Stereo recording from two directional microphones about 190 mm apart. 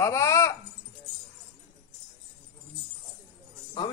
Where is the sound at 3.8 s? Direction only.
25° left (ahead or behind).